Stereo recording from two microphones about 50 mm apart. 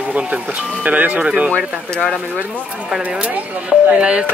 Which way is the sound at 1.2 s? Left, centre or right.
Right.